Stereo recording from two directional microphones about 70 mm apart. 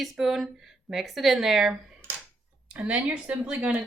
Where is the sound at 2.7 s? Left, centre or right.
Centre.